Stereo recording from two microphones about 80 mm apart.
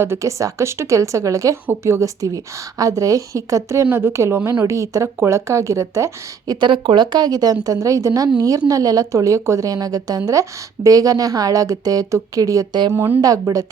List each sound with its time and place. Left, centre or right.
0.0 s speech: right
2.2 s a woman's voice: right
3.8 s a woman's voice: right
6.5 s a woman's voice: right